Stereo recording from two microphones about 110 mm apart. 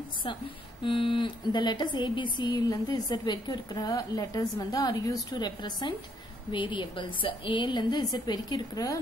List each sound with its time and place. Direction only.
0.8 s a woman's voice: 50° left (ahead or behind); by 9.0 s 35° left (ahead or behind)